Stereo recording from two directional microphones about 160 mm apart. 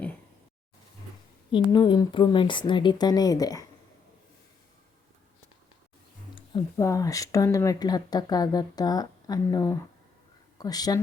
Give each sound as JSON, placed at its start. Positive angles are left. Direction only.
{"t": 1.5, "sound": "speech", "side_deg": 30}
{"t": 6.7, "sound": "speech", "side_deg": 20}